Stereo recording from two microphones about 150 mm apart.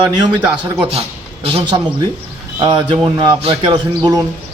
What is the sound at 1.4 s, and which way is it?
A man's voice, 40° right (ahead or behind).